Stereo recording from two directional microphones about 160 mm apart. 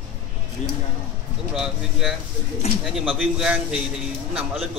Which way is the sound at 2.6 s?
40° left (ahead or behind).